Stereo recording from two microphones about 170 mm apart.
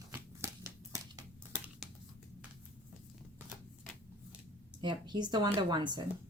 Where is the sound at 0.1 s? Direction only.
15° right (ahead or behind).